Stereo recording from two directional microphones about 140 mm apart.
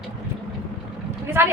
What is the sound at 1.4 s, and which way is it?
Speech, 15° right (ahead or behind).